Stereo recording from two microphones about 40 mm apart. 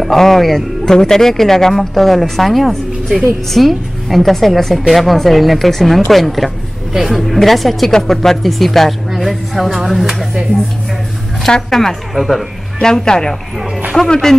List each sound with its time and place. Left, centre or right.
0.0 s speech: centre
0.9 s a woman's voice: centre
11.4 s a woman's voice: centre
12.1 s a woman's voice: centre
12.8 s a woman's voice: centre